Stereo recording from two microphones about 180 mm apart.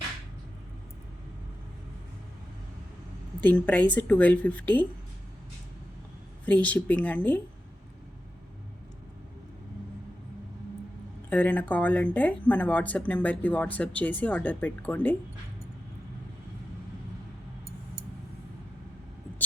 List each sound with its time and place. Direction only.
3.4 s speech: 10° left (ahead or behind)
6.4 s speech: 10° left (ahead or behind)
11.3 s speech: 10° left (ahead or behind)